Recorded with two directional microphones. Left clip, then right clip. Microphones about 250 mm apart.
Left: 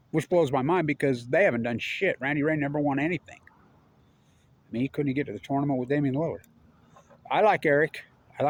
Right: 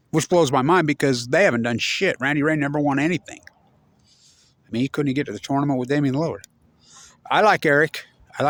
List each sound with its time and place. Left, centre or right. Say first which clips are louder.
0.1 s speech: right 6 dB; right
4.7 s speech: right 6 dB; right